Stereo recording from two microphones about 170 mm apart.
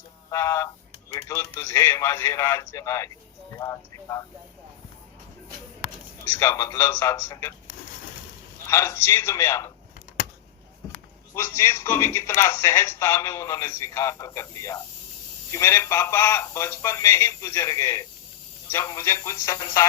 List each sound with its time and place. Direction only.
0.3 s speech: 20° left (ahead or behind)
6.2 s speech: 15° left (ahead or behind)
8.6 s speech: 15° left (ahead or behind)
11.3 s speech: 15° left (ahead or behind)